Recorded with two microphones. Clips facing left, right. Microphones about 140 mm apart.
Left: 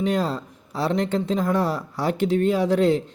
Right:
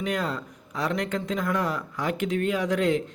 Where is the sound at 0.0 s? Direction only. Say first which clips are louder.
Left 5 dB; 30° left (ahead or behind).